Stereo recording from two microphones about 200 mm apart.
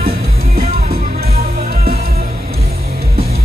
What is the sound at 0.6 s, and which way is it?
Music, 50° right (ahead or behind).